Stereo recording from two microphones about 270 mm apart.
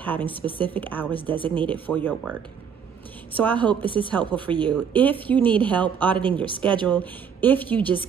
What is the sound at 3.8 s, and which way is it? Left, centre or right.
Speech, centre.